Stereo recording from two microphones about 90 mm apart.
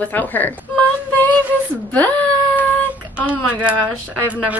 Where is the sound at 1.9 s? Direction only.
15° left (ahead or behind).